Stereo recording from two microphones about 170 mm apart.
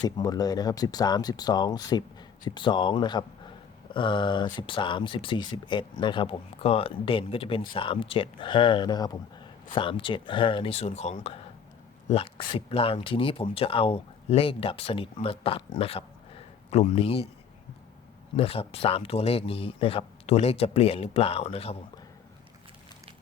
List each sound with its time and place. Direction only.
0.0 s speech: 25° left (ahead or behind)
18.3 s speech: 35° left (ahead or behind)